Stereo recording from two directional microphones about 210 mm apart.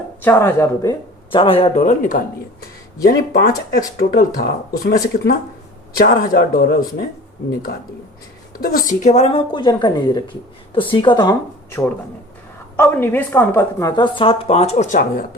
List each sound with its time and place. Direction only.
0.2 s speech: 10° left (ahead or behind); by 4.9 s 45° left (ahead or behind)
6.0 s speech: 45° left (ahead or behind)
8.5 s a woman's voice: 45° left (ahead or behind)